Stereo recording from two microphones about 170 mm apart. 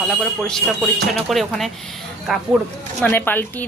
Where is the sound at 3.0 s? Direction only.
10° left (ahead or behind).